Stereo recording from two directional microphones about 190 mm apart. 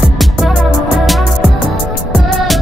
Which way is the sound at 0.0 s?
Centre (ahead or behind).